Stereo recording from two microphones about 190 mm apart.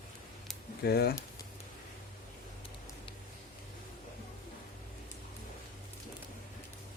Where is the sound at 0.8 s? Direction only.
55° left (ahead or behind).